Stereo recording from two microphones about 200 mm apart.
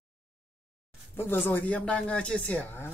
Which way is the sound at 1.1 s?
10° left (ahead or behind).